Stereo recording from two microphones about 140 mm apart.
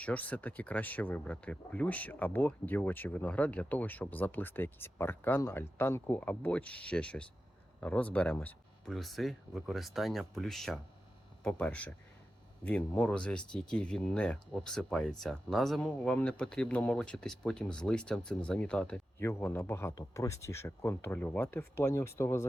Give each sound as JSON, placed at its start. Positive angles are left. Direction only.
{"t": 0.0, "sound": "speech", "side_deg": 10}
{"t": 19.2, "sound": "a man's voice", "side_deg": 20}